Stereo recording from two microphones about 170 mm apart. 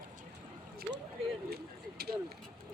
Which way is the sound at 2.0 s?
70° right (ahead or behind).